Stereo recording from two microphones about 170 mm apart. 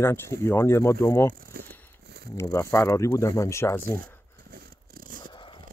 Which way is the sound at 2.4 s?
15° left (ahead or behind).